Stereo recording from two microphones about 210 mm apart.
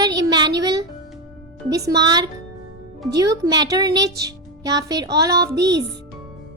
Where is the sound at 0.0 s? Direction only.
20° right (ahead or behind).